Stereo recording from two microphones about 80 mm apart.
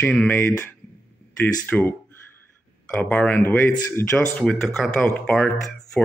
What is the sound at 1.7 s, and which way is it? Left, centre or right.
Speech, left.